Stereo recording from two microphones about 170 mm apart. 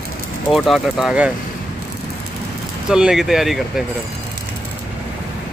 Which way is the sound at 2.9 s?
5° right (ahead or behind).